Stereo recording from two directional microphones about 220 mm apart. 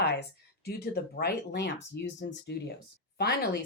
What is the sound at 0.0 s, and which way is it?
Speech, 45° left (ahead or behind).